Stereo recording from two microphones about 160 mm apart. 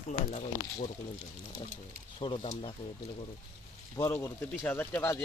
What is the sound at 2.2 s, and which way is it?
Speech, 35° left (ahead or behind).